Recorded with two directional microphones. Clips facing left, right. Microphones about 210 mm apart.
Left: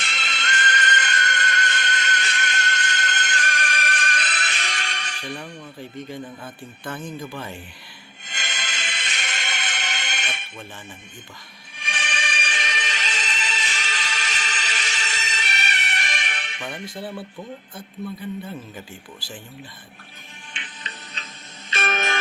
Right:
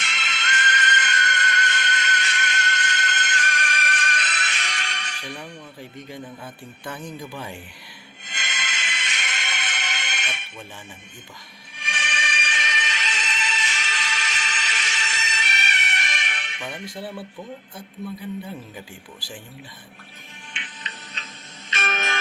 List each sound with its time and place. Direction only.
0.0 s music: 35° left (ahead or behind)
5.4 s speech: 10° right (ahead or behind)
8.2 s music: 35° left (ahead or behind)
11.8 s music: 35° left (ahead or behind)
16.8 s speech: 10° right (ahead or behind)
20.5 s music: 35° left (ahead or behind)